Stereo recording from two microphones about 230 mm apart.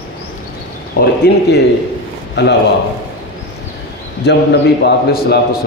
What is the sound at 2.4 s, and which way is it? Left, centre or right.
Speech, left.